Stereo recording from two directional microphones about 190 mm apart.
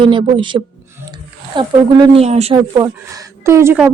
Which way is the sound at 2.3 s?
35° right (ahead or behind).